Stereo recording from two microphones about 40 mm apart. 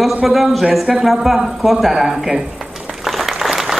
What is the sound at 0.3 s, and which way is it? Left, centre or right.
A man's voice, centre.